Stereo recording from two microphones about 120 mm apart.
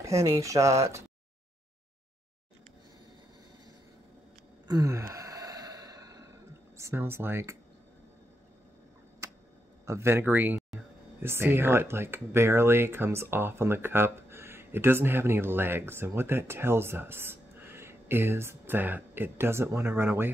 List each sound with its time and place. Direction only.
0.0 s speech: 25° right (ahead or behind)
4.6 s sigh: 30° right (ahead or behind)
6.8 s speech: 20° right (ahead or behind)
9.8 s speech: 20° right (ahead or behind)